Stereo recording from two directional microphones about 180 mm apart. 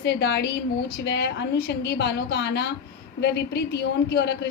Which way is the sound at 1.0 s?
75° left (ahead or behind).